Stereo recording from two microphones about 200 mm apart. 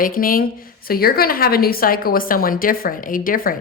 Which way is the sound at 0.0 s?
45° left (ahead or behind).